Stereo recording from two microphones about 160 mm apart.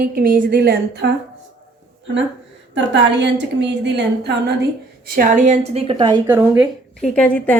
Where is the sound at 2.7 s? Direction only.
90° right.